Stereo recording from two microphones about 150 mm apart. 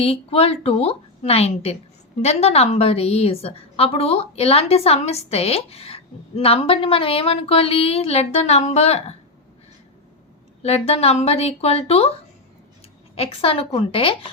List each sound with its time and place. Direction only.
0.0 s a woman's voice: 40° left (ahead or behind)
10.6 s speech: 45° left (ahead or behind)
13.1 s a woman's voice: 40° left (ahead or behind)